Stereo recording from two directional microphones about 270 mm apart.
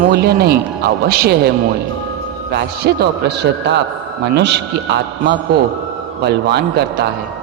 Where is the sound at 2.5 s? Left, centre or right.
Right.